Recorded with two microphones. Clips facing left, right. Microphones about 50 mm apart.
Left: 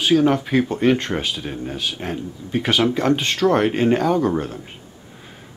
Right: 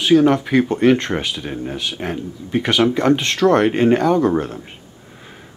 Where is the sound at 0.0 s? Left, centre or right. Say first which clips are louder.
Right 3 dB; centre.